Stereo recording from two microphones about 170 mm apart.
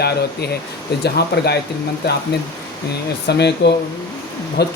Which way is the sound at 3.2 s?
80° left.